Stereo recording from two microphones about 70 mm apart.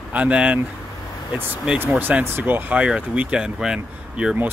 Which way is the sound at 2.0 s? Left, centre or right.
Right.